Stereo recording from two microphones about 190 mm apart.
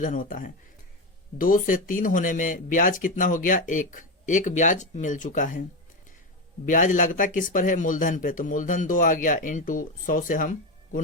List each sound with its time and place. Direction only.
0.0 s speech: 45° left (ahead or behind)
6.7 s speech: 40° left (ahead or behind)